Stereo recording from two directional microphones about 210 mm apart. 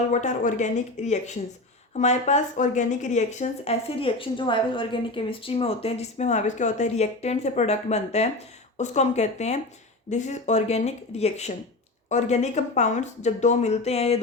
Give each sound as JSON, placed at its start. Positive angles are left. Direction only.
{"t": 0.1, "sound": "speech", "side_deg": 35}